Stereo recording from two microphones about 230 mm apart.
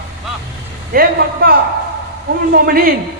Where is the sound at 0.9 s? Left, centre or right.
Right.